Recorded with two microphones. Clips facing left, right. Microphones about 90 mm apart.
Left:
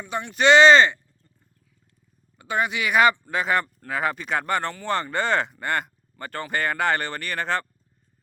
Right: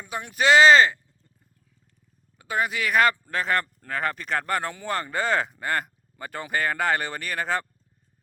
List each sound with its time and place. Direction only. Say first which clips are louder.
0.0 s speech: left 3 dB; 5° right (ahead or behind)
2.4 s speech: left 1 dB; centre (ahead or behind)